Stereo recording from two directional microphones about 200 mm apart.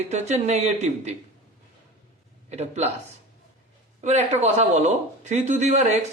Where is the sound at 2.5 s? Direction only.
35° right (ahead or behind).